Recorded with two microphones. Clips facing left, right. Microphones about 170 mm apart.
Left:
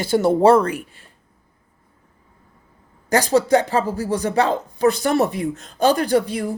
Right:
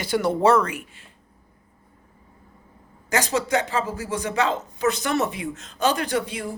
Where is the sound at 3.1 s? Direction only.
35° left (ahead or behind).